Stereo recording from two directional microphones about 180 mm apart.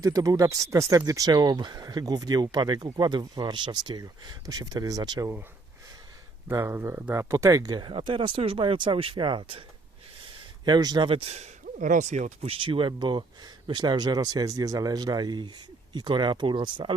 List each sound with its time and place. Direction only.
0.0 s speech: 20° right (ahead or behind)
6.5 s speech: 15° right (ahead or behind); by 9.6 s 30° right (ahead or behind)
10.7 s speech: 25° right (ahead or behind)